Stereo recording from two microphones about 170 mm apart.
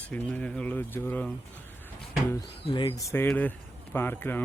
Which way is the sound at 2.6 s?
25° left (ahead or behind).